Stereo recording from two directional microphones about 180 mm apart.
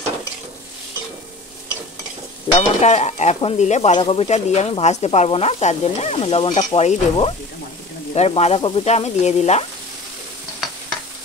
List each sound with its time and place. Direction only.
2.5 s stir: 30° left (ahead or behind)
2.8 s speech: 40° left (ahead or behind)